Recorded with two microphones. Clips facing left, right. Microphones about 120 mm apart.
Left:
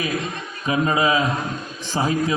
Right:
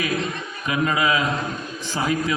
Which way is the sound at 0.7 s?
30° left (ahead or behind).